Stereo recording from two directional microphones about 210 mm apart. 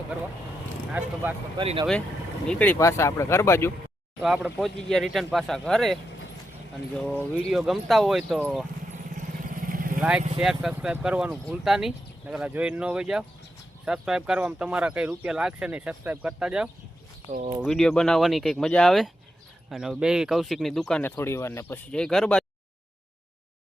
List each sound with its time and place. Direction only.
0.9 s speech: 10° right (ahead or behind)
1.5 s speech: 25° right (ahead or behind)
2.5 s speech: 5° left (ahead or behind)
4.5 s speech: centre (ahead or behind)
8.9 s vehicle: 40° right (ahead or behind)
10.0 s speech: 5° right (ahead or behind)